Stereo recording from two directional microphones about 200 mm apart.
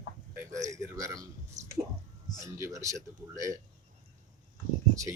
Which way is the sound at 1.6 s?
35° right (ahead or behind).